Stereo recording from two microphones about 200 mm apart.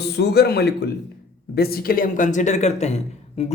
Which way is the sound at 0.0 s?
55° left (ahead or behind).